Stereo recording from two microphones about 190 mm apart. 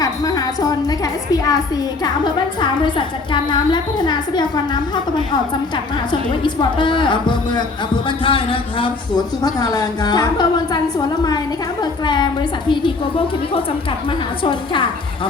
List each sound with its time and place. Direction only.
0.0 s a woman's voice: 20° left (ahead or behind)